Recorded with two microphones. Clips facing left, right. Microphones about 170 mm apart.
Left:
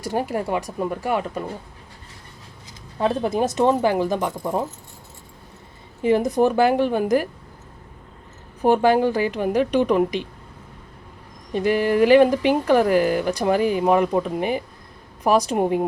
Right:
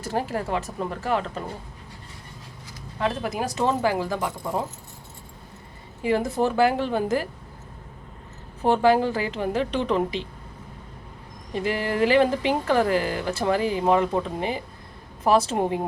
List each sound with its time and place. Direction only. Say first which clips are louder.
0.0 s speech: left 3 dB; 15° left (ahead or behind)
3.0 s speech: left 6 dB; 30° left (ahead or behind)
6.0 s speech: left 5 dB; 20° left (ahead or behind)
8.6 s speech: left 3 dB; 15° left (ahead or behind)
11.5 s speech: left 6 dB; 15° left (ahead or behind)